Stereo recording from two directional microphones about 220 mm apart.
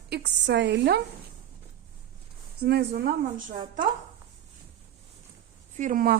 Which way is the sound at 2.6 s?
45° right (ahead or behind).